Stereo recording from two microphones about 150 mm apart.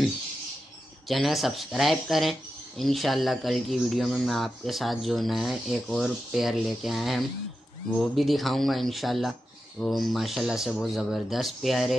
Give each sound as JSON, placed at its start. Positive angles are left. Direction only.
{"t": 1.0, "sound": "speech", "side_deg": 0}